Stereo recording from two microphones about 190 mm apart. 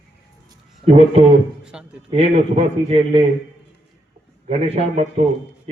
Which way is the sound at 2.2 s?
35° right (ahead or behind).